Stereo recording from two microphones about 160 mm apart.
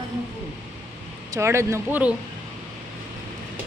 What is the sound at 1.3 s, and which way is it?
Speech, 15° right (ahead or behind).